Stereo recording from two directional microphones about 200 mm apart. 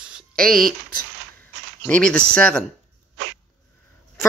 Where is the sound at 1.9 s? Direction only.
5° left (ahead or behind).